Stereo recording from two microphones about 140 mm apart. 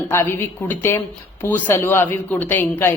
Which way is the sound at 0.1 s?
15° left (ahead or behind).